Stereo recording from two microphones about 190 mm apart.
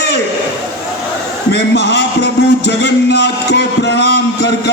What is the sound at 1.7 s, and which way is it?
A man's voice, 65° left (ahead or behind).